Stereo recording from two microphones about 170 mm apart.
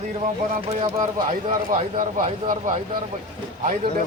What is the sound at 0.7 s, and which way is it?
Speech, 35° right (ahead or behind).